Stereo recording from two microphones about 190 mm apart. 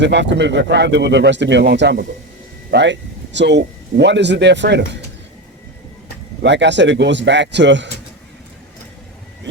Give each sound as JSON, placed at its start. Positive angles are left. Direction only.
{"t": 0.0, "sound": "speech", "side_deg": -65}
{"t": 6.4, "sound": "speech", "side_deg": -65}